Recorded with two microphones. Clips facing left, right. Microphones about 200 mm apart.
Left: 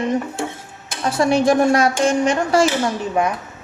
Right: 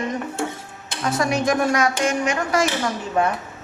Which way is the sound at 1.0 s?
30° left (ahead or behind).